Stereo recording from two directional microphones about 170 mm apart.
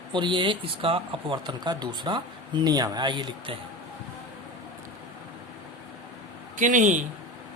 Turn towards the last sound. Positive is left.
turn(degrees=-50)  # may be behind; listen again after turning